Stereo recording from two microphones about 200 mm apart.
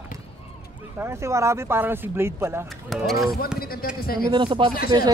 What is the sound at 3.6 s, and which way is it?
Speech, 50° left (ahead or behind).